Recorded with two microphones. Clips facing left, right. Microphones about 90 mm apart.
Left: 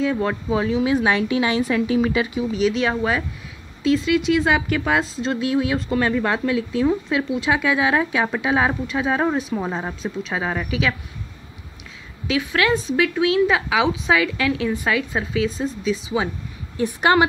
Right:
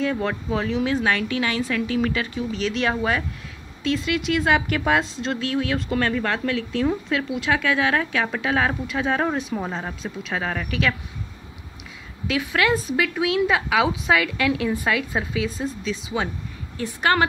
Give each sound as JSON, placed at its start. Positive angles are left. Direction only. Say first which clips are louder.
{"t": 0.0, "sound": "speech", "louder": "left 3 dB", "side_deg": 5}
{"t": 12.3, "sound": "speech", "louder": "left 2 dB", "side_deg": 0}
{"t": 16.7, "sound": "speech", "louder": "left 4 dB", "side_deg": 15}